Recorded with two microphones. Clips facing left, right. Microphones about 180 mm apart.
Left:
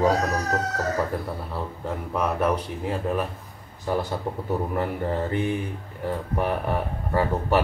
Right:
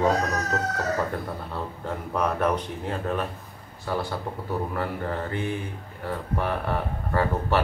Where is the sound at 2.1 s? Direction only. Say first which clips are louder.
Left 1 dB; 5° left (ahead or behind).